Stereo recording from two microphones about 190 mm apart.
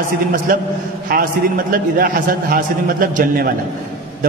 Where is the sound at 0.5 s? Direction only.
50° right (ahead or behind).